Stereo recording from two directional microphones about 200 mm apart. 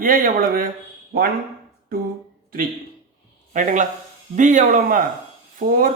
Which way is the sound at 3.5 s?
40° right (ahead or behind).